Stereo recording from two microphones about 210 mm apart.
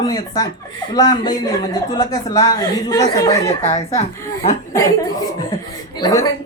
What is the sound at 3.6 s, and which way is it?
Speech, 30° left (ahead or behind).